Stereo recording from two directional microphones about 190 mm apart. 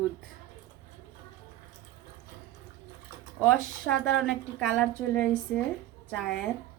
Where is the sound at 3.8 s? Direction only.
5° left (ahead or behind).